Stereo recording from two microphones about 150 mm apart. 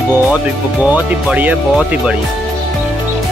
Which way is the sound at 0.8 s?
10° right (ahead or behind).